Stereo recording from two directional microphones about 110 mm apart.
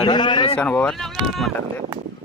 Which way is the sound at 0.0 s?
45° left (ahead or behind).